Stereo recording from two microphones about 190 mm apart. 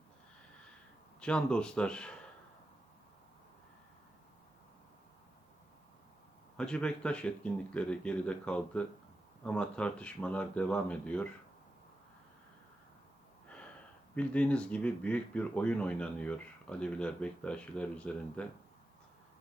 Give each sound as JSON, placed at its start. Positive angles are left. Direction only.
{"t": 1.2, "sound": "speech", "side_deg": 5}
{"t": 6.6, "sound": "speech", "side_deg": 5}
{"t": 14.2, "sound": "speech", "side_deg": 5}